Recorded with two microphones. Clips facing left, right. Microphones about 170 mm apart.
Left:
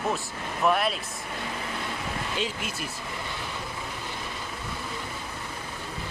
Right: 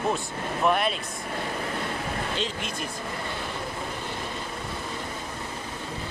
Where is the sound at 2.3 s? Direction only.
10° left (ahead or behind).